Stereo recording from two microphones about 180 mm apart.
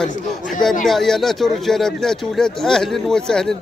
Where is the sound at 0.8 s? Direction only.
Centre (ahead or behind).